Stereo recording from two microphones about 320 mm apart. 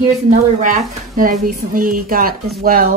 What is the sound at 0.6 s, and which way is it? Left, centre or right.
A woman's voice, right.